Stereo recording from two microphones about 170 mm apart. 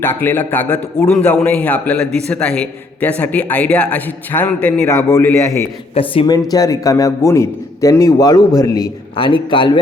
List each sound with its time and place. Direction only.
0.0 s a man's voice: 10° left (ahead or behind)
5.9 s speech: 35° left (ahead or behind)
6.3 s a man's voice: 20° left (ahead or behind)